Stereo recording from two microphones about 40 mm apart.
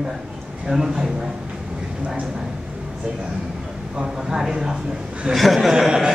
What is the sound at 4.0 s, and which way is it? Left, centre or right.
A man's voice, centre.